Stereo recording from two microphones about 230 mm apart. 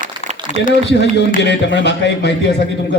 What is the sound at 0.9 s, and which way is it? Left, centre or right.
A man's voice, left.